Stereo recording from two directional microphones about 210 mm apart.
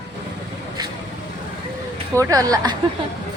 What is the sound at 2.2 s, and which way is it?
Speech, 15° right (ahead or behind).